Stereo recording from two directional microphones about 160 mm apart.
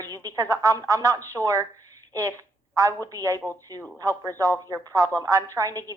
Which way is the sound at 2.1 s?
20° right (ahead or behind).